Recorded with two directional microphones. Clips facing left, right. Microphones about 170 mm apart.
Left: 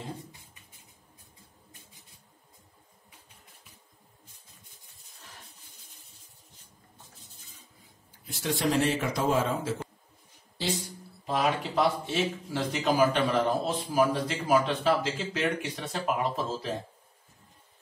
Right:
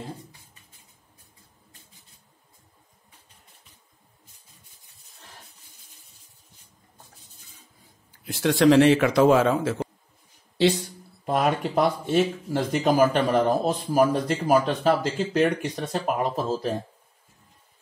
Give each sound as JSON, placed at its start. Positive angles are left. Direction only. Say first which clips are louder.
{"t": 8.3, "sound": "speech", "louder": "right 10 dB", "side_deg": -85}
{"t": 11.2, "sound": "speech", "louder": "right 5 dB", "side_deg": -55}